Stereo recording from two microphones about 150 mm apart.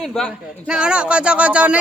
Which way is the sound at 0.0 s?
5° left (ahead or behind).